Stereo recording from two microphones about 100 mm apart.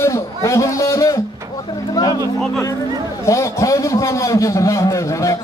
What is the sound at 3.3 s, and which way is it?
A man's voice, 30° left (ahead or behind).